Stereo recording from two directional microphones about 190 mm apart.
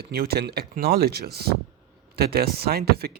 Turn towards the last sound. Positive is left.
turn(degrees=-55)  # may be behind; listen again after turning